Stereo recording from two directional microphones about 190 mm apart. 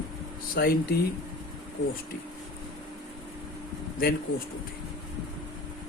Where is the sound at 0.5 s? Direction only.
50° left (ahead or behind).